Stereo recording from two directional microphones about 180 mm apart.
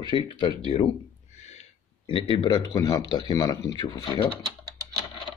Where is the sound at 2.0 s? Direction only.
30° left (ahead or behind).